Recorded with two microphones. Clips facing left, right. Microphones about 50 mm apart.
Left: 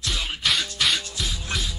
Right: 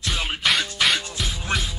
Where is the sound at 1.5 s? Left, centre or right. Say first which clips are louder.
Right 5 dB; right.